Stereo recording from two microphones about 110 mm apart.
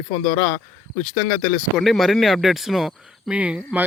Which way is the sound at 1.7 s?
Centre (ahead or behind).